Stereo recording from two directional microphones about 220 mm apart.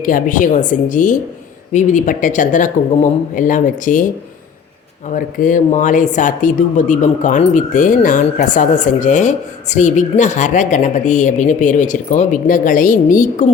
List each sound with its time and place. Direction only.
0.0 s speech: 35° left (ahead or behind)
5.1 s speech: 35° left (ahead or behind)